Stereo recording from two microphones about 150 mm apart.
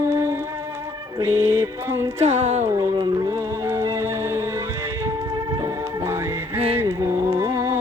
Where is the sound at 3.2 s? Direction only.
15° right (ahead or behind).